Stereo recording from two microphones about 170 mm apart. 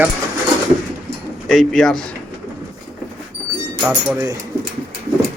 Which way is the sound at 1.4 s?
Centre (ahead or behind).